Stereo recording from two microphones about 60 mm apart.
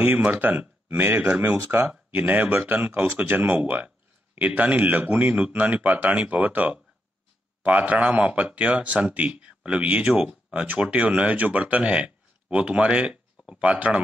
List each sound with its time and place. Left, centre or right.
0.0 s speech: right